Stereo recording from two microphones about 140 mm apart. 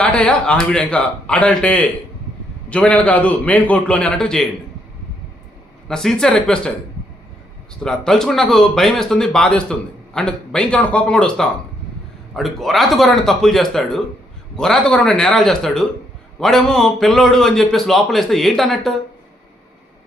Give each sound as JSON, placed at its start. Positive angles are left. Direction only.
{"t": 0.0, "sound": "a man's voice", "side_deg": 5}
{"t": 5.9, "sound": "a man's voice", "side_deg": 5}
{"t": 7.8, "sound": "a man's voice", "side_deg": 5}